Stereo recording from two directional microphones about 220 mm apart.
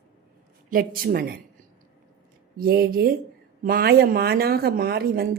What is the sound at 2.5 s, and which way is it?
A woman's voice, 45° right (ahead or behind).